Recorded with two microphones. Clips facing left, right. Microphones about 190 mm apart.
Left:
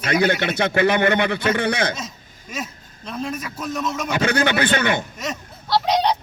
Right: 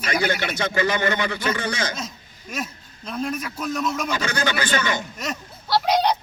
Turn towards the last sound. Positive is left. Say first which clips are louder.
# left 1 dB
turn(degrees=0)  # may be behind; listen again after turning